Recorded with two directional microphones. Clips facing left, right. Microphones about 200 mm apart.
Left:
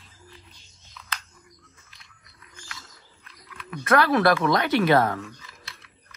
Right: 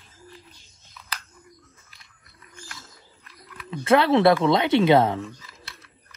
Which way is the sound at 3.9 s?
25° right (ahead or behind).